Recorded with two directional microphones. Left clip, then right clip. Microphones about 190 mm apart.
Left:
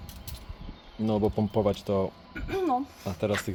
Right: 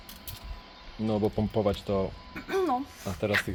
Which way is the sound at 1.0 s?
20° left (ahead or behind).